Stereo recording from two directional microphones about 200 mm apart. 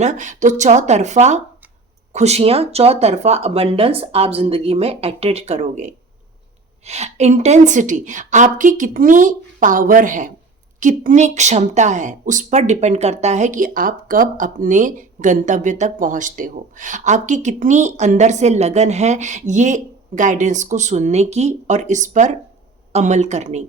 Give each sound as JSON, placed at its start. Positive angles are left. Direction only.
{"t": 0.0, "sound": "speech", "side_deg": -35}